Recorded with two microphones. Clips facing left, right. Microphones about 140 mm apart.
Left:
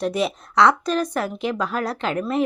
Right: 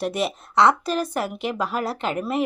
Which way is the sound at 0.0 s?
Centre (ahead or behind).